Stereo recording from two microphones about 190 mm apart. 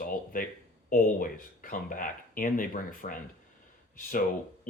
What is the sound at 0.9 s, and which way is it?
Speech, 45° left (ahead or behind).